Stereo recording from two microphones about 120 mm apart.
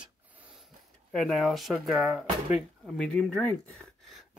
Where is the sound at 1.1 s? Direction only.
5° left (ahead or behind).